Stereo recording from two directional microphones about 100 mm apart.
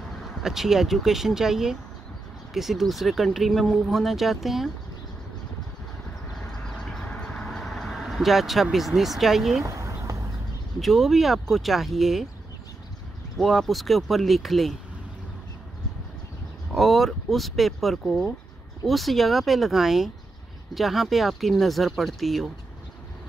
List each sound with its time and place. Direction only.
0.4 s speech: 5° right (ahead or behind)
6.4 s vehicle: 5° left (ahead or behind)
8.6 s speech: centre (ahead or behind)
9.7 s a sound: 30° right (ahead or behind)
10.8 s speech: centre (ahead or behind)
13.4 s speech: centre (ahead or behind)
16.7 s speech: centre (ahead or behind)